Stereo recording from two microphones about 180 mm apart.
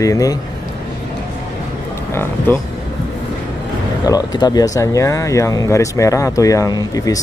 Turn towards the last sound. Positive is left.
turn(degrees=20)  # may be behind; listen again after turning